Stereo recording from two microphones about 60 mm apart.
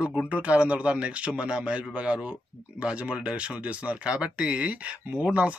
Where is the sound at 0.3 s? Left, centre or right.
Right.